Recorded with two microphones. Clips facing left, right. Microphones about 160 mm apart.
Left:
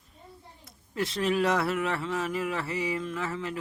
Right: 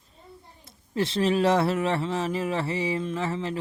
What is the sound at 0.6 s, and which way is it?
Speech, 25° right (ahead or behind).